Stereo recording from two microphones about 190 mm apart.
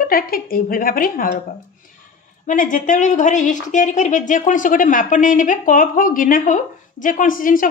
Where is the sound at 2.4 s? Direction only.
45° left (ahead or behind).